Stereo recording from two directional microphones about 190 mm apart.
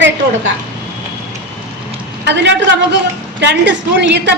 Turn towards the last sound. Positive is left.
turn(degrees=-65)  # may be behind; listen again after turning